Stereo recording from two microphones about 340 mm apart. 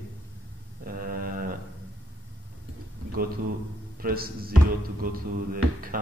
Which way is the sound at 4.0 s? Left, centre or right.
Right.